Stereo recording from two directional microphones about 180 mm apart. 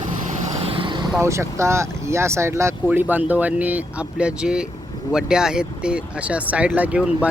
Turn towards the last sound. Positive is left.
turn(degrees=-5)  # may be behind; listen again after turning